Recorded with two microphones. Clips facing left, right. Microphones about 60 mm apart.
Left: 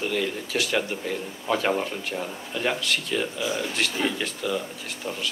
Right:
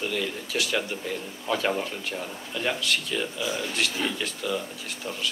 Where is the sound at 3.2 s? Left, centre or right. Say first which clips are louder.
Left 2 dB; centre.